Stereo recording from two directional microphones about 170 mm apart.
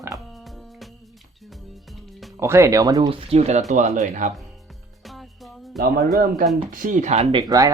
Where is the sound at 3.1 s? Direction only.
40° right (ahead or behind).